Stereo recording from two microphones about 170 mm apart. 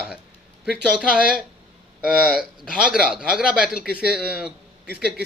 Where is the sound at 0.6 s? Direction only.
5° right (ahead or behind).